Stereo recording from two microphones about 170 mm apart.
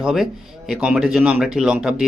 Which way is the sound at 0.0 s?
Centre (ahead or behind).